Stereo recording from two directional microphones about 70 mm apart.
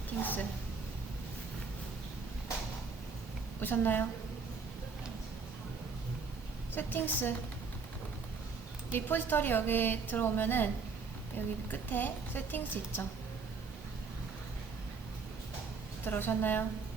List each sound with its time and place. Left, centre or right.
0.2 s a sound: left
3.6 s a woman's voice: left
6.7 s a woman's voice: left
8.9 s a woman's voice: left
16.0 s a woman's voice: left